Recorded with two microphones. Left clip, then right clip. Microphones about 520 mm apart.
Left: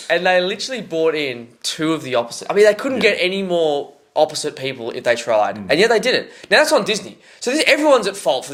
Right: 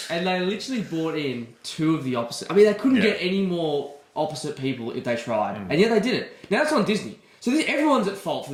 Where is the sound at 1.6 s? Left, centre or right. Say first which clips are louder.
Left 5 dB; left.